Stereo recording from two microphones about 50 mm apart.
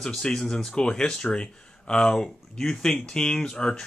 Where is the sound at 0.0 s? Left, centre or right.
Centre.